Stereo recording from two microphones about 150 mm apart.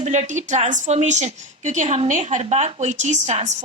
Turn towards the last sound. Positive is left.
turn(degrees=-50)  # may be behind; listen again after turning